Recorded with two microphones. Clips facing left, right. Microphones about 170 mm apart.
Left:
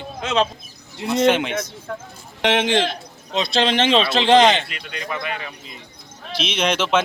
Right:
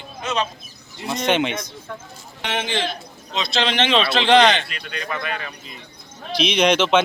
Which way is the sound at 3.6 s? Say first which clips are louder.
Left 2 dB; 40° left (ahead or behind).